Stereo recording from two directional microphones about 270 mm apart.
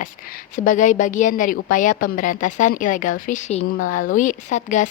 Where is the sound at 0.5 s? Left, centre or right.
Left.